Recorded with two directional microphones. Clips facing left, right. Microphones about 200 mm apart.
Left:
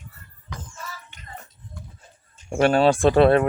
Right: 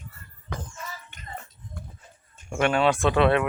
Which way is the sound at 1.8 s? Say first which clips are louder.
Right 1 dB; 55° right (ahead or behind).